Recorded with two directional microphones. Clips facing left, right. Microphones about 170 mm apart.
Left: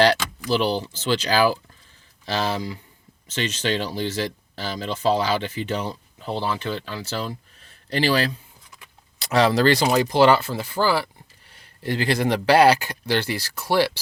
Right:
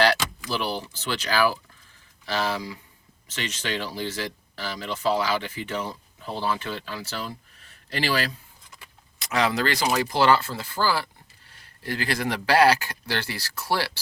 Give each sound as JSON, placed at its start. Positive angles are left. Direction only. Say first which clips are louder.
{"t": 0.5, "sound": "speech", "louder": "left 8 dB", "side_deg": 25}